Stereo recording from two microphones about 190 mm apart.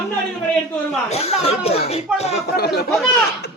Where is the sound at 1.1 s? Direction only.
30° left (ahead or behind).